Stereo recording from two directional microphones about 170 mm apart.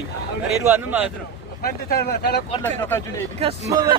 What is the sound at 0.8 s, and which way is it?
Speech, 10° right (ahead or behind).